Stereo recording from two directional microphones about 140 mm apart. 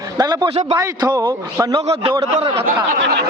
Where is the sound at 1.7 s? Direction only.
40° right (ahead or behind).